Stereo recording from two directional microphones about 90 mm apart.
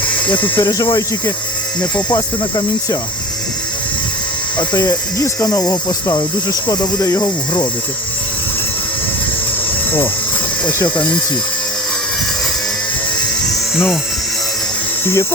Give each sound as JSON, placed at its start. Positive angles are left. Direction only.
{"t": 0.3, "sound": "speech", "side_deg": 20}
{"t": 0.6, "sound": "speech", "side_deg": 45}
{"t": 1.8, "sound": "speech", "side_deg": 15}
{"t": 2.1, "sound": "speech", "side_deg": 45}
{"t": 4.7, "sound": "speech", "side_deg": 35}
{"t": 15.0, "sound": "speech", "side_deg": 30}